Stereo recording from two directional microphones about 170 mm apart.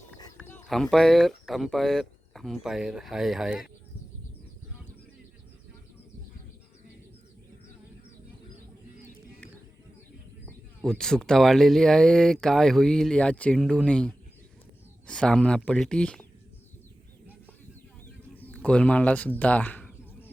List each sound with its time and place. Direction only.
0.3 s speech: 10° left (ahead or behind)
10.8 s speech: 5° left (ahead or behind)
18.3 s bird: 10° left (ahead or behind)